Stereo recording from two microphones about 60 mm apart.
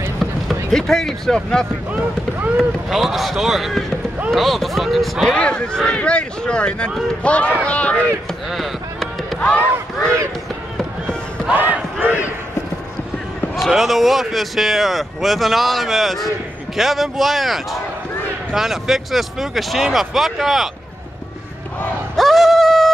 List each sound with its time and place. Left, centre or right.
0.2 s speech: centre
1.9 s speech: right
2.9 s speech: centre
5.3 s speech: centre
8.5 s a sound: centre
11.5 s speech: right
13.6 s speech: centre
22.1 s a sound: centre